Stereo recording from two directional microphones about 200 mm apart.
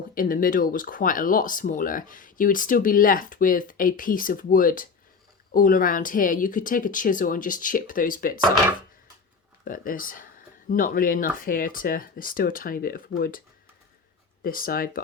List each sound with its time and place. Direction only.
0.1 s speech: 45° left (ahead or behind)
9.6 s speech: 45° left (ahead or behind)
14.4 s speech: 45° left (ahead or behind)